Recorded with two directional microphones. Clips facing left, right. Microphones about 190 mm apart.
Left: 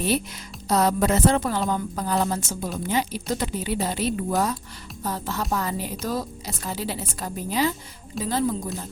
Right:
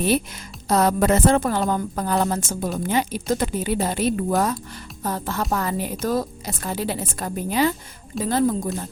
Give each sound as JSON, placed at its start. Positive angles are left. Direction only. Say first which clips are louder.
{"t": 0.7, "sound": "a woman's voice", "louder": "right 3 dB", "side_deg": -55}